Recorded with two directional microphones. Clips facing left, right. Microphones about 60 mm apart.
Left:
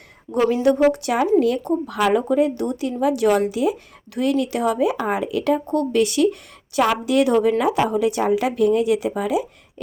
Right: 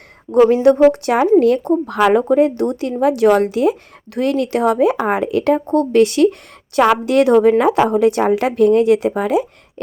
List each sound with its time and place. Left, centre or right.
0.3 s speech: right